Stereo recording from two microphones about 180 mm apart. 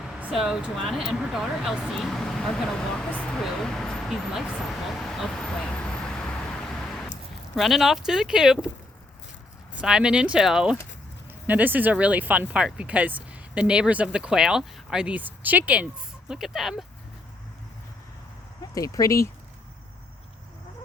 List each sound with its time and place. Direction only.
0.0 s speech: 5° right (ahead or behind)
4.9 s vehicle: centre (ahead or behind)
7.5 s speech: centre (ahead or behind)
9.8 s speech: 5° right (ahead or behind)
18.7 s speech: 20° left (ahead or behind)